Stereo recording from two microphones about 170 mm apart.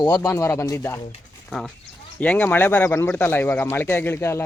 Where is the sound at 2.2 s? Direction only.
10° left (ahead or behind).